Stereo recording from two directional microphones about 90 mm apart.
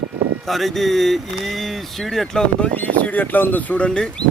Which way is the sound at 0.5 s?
Centre (ahead or behind).